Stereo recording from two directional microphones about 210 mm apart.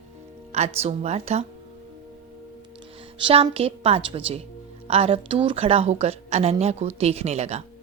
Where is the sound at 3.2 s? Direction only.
30° right (ahead or behind).